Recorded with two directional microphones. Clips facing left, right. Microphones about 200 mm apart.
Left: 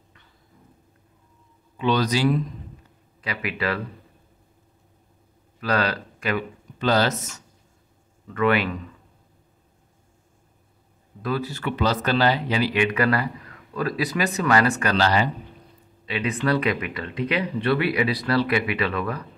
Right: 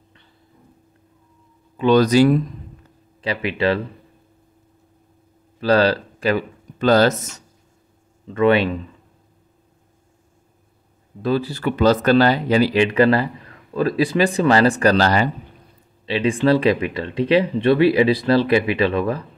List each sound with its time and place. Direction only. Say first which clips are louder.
1.8 s speech: right 8 dB; 50° right (ahead or behind)
3.2 s speech: right 7 dB; 30° right (ahead or behind)
5.6 s speech: right 8 dB; 30° right (ahead or behind)
6.8 s speech: right 6 dB; 45° right (ahead or behind)
8.3 s speech: right 6 dB; 25° right (ahead or behind)
11.2 s speech: right 6 dB; 30° right (ahead or behind); by 15.2 s 45° right (ahead or behind)
16.1 s speech: right 7 dB; 30° right (ahead or behind)